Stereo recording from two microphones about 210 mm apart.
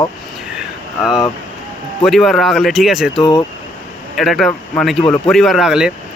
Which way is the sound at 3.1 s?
20° left (ahead or behind).